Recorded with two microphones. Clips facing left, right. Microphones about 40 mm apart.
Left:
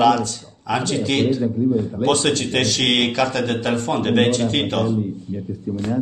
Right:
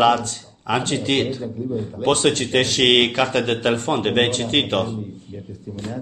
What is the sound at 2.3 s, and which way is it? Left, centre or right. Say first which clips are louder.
A man's voice: right 1 dB; right.